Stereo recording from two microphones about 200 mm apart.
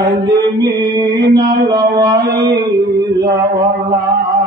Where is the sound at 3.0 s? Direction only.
20° right (ahead or behind).